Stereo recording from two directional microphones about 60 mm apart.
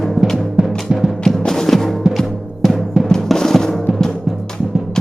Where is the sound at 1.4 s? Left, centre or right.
Centre.